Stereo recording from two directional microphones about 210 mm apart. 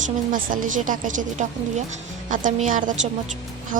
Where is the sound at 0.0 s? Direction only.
40° right (ahead or behind).